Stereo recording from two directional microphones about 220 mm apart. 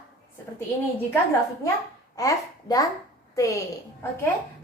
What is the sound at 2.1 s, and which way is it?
A woman's voice, 15° left (ahead or behind).